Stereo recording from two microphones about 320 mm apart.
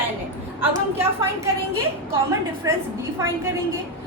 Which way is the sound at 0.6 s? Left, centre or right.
Centre.